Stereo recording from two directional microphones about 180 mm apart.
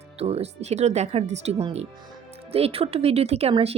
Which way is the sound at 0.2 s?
35° right (ahead or behind).